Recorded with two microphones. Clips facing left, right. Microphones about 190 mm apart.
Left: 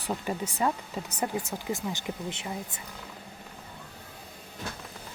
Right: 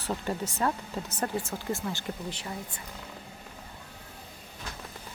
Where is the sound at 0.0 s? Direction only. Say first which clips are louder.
Even; 15° left (ahead or behind).